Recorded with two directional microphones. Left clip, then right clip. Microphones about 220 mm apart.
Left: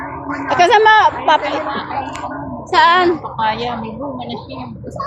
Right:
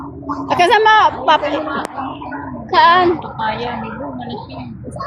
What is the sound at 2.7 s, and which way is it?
Speech, centre (ahead or behind).